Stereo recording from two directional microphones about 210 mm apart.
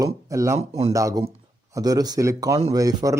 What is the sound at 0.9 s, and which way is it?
Speech, 15° right (ahead or behind).